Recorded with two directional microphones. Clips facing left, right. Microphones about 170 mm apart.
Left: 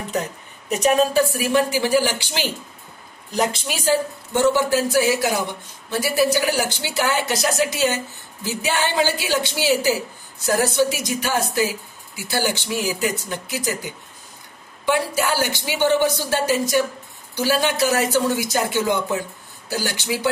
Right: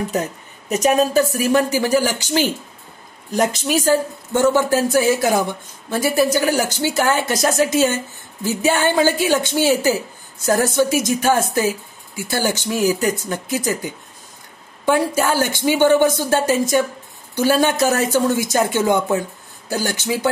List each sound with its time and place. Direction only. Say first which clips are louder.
0.7 s a woman's voice: right 1 dB; 40° right (ahead or behind)
14.9 s a woman's voice: right 4 dB; 50° right (ahead or behind)